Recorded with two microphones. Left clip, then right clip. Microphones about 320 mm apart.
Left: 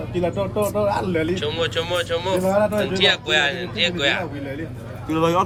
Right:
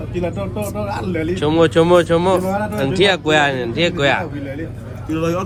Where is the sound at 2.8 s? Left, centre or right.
Centre.